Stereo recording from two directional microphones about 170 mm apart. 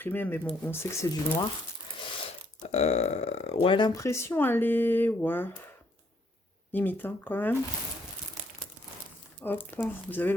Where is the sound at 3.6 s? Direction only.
30° left (ahead or behind); by 5.5 s 10° left (ahead or behind).